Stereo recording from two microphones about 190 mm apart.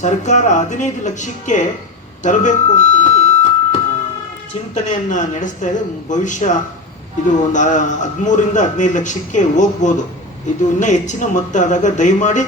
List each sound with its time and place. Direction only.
0.0 s a man's voice: 40° left (ahead or behind)
2.2 s a sound: 40° left (ahead or behind)
4.7 s a man's voice: 40° left (ahead or behind)